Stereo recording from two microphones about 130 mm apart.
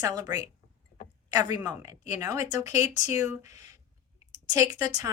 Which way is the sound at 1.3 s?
30° right (ahead or behind).